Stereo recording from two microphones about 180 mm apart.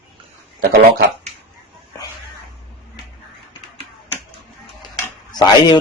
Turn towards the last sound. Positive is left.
turn(degrees=25)  # may be behind; listen again after turning